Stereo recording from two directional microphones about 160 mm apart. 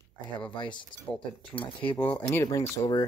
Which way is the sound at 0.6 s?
30° left (ahead or behind).